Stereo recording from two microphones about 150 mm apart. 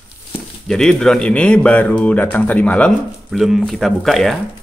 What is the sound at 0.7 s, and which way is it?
Speech, 5° left (ahead or behind).